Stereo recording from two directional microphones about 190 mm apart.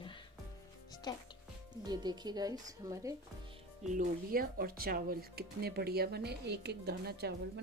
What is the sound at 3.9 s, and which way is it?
Speech, 45° right (ahead or behind).